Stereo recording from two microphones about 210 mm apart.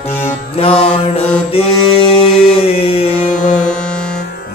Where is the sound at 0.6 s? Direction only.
30° left (ahead or behind).